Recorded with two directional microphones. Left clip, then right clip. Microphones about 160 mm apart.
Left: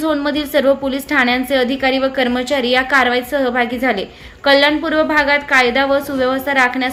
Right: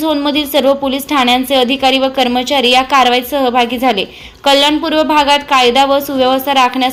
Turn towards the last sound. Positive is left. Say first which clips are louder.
# right 4 dB
turn(degrees=-15)  # may be behind; listen again after turning